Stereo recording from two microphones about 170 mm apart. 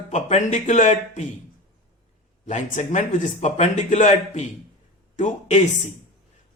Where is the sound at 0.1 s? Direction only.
45° left (ahead or behind).